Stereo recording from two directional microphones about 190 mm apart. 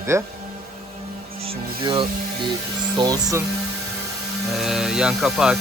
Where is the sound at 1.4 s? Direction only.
30° right (ahead or behind).